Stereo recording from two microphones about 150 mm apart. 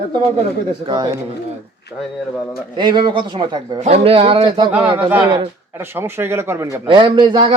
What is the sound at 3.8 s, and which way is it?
Speech, 40° right (ahead or behind).